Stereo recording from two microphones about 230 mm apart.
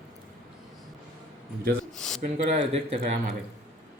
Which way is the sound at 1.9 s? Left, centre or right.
Centre.